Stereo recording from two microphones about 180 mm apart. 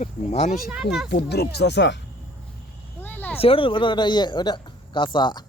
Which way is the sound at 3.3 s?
30° left (ahead or behind).